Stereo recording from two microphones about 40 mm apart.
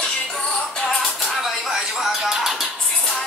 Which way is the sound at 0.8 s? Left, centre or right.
Centre.